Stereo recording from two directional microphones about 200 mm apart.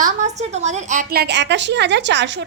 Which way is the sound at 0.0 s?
35° right (ahead or behind).